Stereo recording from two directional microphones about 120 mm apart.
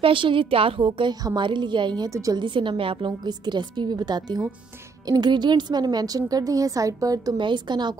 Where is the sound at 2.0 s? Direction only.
25° right (ahead or behind).